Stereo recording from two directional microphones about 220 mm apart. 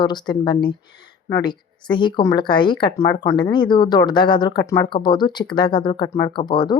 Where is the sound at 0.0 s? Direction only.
20° left (ahead or behind).